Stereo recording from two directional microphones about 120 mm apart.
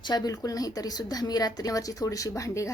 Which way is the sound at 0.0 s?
35° left (ahead or behind).